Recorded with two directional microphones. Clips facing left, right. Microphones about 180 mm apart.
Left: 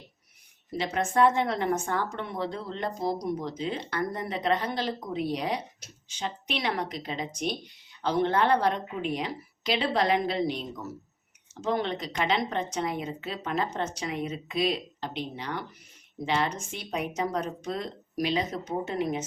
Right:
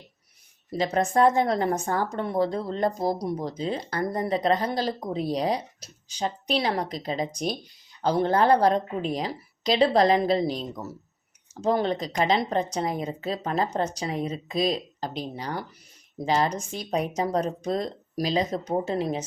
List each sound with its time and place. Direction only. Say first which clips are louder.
0.7 s speech: right 4 dB; 40° right (ahead or behind)